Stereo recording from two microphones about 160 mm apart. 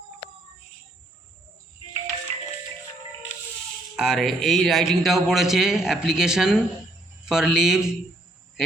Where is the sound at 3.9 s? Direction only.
Centre (ahead or behind).